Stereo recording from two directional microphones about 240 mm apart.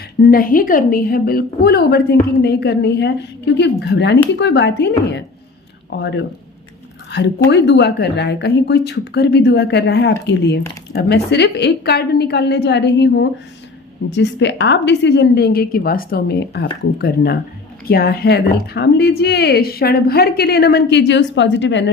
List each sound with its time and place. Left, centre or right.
0.3 s a woman's voice: left